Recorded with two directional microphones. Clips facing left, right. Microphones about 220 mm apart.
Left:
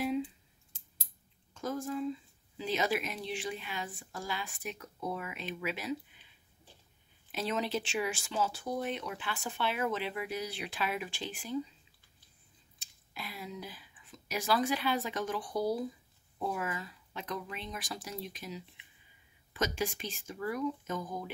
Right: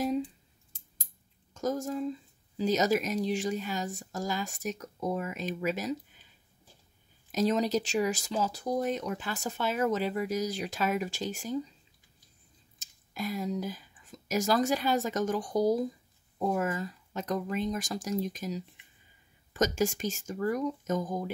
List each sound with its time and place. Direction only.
1.5 s speech: 40° right (ahead or behind)
7.2 s speech: 40° right (ahead or behind)
12.7 s speech: 45° right (ahead or behind)